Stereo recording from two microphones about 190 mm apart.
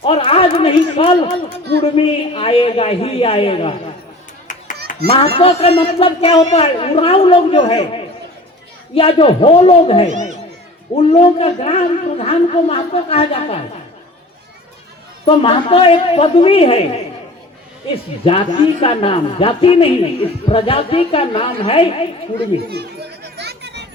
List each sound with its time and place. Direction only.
0.0 s speech: 30° left (ahead or behind)
4.5 s a sound: 40° left (ahead or behind)
5.1 s a woman's voice: 30° left (ahead or behind)
10.1 s a child's voice: 40° right (ahead or behind)
11.1 s speech: 35° left (ahead or behind)
15.2 s a woman's voice: 30° left (ahead or behind)
18.3 s a woman's voice: 30° left (ahead or behind)
22.7 s children playing: 60° right (ahead or behind)